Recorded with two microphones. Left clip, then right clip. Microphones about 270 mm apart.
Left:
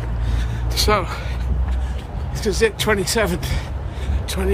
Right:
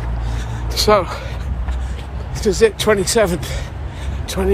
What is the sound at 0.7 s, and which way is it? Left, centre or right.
Speech, centre.